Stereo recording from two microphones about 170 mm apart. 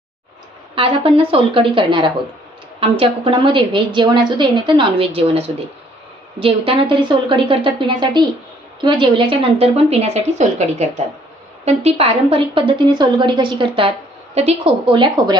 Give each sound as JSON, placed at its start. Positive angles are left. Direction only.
{"t": 0.8, "sound": "a woman's voice", "side_deg": -35}